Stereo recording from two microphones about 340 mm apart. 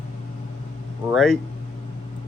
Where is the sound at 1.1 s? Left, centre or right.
Centre.